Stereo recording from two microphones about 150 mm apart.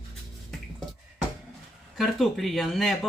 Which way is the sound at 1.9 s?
Centre (ahead or behind).